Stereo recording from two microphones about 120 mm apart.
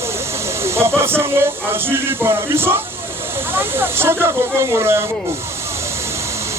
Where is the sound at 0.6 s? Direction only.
20° right (ahead or behind).